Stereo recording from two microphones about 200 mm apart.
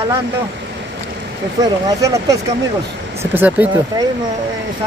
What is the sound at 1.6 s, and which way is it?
Speech, 15° right (ahead or behind).